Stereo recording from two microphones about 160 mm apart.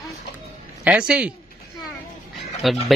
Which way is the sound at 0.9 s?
5° right (ahead or behind).